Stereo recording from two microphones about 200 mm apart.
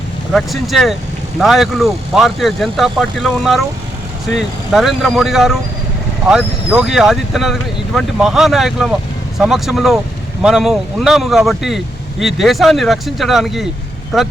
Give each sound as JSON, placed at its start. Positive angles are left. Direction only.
{"t": 0.3, "sound": "speech", "side_deg": 0}